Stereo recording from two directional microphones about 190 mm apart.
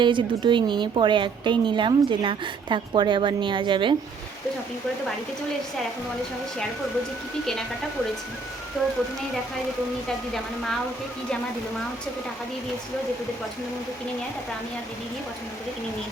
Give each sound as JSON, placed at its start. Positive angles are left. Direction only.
{"t": 0.0, "sound": "a woman's voice", "side_deg": -25}
{"t": 8.8, "sound": "speech", "side_deg": 0}